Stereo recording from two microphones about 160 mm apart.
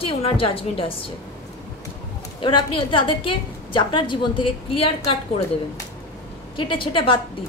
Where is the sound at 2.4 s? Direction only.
30° left (ahead or behind).